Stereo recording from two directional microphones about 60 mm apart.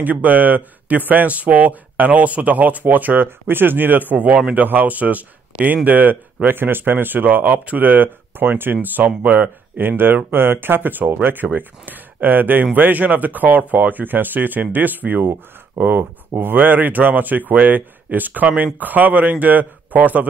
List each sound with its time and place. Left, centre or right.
0.0 s speech: right